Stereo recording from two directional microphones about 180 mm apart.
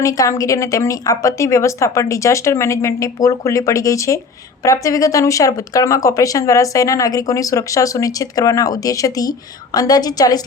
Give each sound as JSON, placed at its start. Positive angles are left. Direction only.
{"t": 0.0, "sound": "a woman's voice", "side_deg": 20}